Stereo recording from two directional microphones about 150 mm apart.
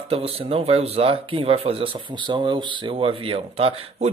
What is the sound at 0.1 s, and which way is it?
Speech, 40° right (ahead or behind).